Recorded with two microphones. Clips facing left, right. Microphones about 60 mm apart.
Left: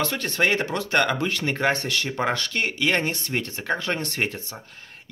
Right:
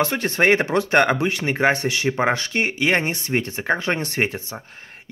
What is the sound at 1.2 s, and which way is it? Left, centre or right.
Speech, centre.